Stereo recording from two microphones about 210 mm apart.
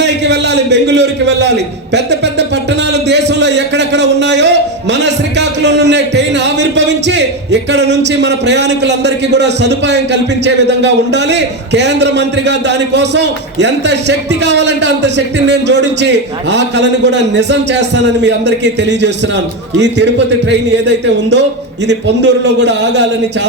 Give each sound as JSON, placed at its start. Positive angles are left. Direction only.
{"t": 0.0, "sound": "a man's voice", "side_deg": -55}
{"t": 20.5, "sound": "a man's voice", "side_deg": -55}